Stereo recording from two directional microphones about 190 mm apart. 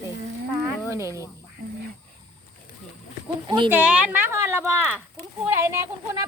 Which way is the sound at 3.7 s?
5° right (ahead or behind).